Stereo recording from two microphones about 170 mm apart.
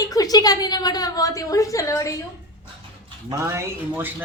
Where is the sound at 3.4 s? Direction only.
15° right (ahead or behind).